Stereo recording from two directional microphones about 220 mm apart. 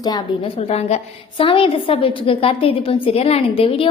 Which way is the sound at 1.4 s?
25° left (ahead or behind).